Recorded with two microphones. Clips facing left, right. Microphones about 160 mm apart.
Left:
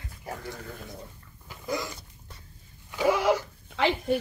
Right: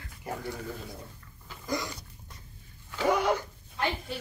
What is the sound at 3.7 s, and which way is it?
Speech, 80° left.